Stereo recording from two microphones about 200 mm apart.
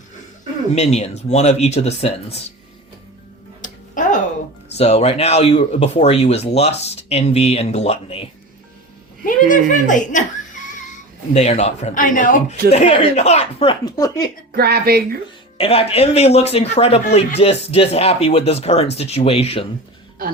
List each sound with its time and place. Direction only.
0.8 s speech: 35° left (ahead or behind)
3.6 s a sound: 40° left (ahead or behind)
4.8 s speech: 30° left (ahead or behind)
9.2 s speech: 40° left (ahead or behind)
11.3 s speech: 35° left (ahead or behind); by 14.3 s 20° left (ahead or behind)
14.5 s speech: 50° right (ahead or behind)
15.5 s speech: 30° left (ahead or behind)